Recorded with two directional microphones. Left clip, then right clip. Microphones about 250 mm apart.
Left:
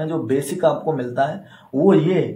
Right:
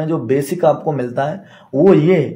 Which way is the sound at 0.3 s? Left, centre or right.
Right.